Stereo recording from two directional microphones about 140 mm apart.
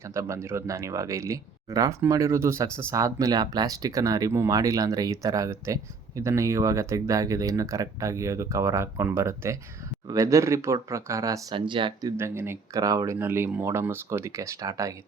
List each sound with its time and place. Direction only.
0.1 s speech: 20° right (ahead or behind)
11.5 s speech: 35° right (ahead or behind)
12.1 s speech: 20° right (ahead or behind)